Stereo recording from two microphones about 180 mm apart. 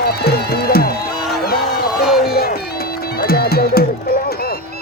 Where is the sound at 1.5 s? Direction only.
55° left (ahead or behind).